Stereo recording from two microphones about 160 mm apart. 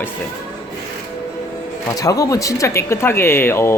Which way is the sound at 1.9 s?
20° left (ahead or behind).